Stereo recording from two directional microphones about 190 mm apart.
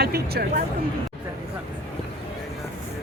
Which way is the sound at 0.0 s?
55° right (ahead or behind).